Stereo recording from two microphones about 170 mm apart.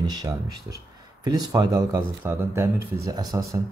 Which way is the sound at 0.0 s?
20° right (ahead or behind).